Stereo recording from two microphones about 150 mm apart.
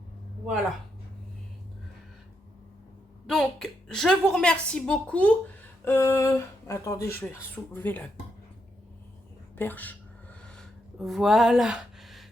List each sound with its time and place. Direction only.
3.2 s a woman's voice: 5° left (ahead or behind)
9.6 s speech: 10° left (ahead or behind)
10.4 s a sound: centre (ahead or behind)